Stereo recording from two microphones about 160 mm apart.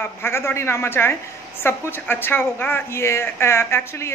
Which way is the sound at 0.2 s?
15° left (ahead or behind).